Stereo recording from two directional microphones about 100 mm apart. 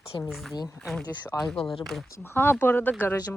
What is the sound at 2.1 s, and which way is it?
Speech, 25° left (ahead or behind).